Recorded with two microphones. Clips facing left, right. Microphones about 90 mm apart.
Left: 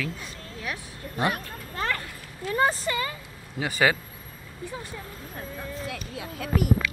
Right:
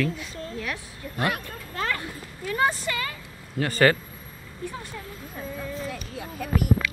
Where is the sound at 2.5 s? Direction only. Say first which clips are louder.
Even; 30° left (ahead or behind).